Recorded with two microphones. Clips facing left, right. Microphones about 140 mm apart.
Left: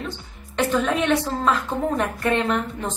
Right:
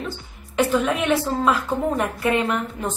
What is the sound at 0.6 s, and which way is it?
Speech, 5° right (ahead or behind).